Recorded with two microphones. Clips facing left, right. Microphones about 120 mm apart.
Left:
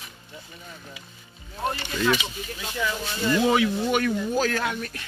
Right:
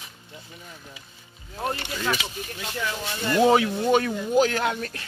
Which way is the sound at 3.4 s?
30° right (ahead or behind).